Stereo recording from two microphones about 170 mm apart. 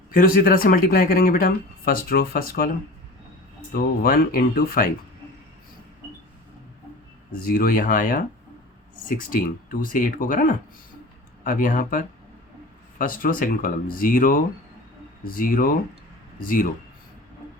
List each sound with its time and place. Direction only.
0.1 s speech: 55° left (ahead or behind)
3.7 s speech: 60° left (ahead or behind)
7.3 s speech: 55° left (ahead or behind)